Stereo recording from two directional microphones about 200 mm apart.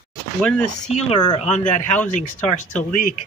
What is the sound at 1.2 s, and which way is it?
Speech, 20° left (ahead or behind).